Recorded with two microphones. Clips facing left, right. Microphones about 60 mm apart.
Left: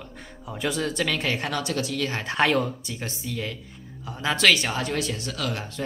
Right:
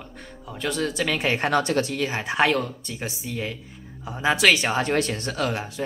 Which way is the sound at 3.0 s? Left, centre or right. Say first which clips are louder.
Right 2 dB; centre.